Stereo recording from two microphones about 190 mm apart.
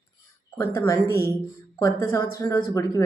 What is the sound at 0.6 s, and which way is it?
A woman's voice, 15° left (ahead or behind).